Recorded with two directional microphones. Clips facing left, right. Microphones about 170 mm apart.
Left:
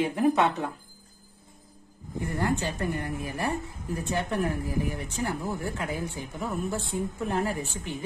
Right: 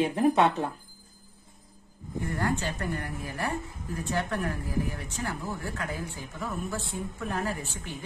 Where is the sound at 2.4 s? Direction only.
15° left (ahead or behind).